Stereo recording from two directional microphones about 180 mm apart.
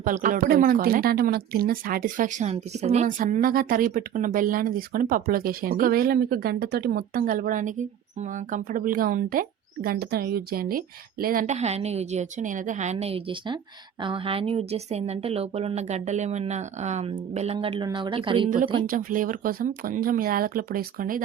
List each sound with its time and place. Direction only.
0.0 s a woman's voice: 45° right (ahead or behind); by 18.5 s 30° right (ahead or behind)
18.9 s speech: 50° right (ahead or behind)